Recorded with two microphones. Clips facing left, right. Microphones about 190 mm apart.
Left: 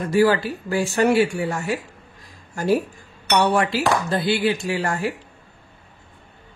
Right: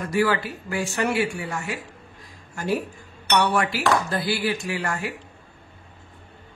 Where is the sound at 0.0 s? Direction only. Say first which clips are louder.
Left 5 dB; 30° left (ahead or behind).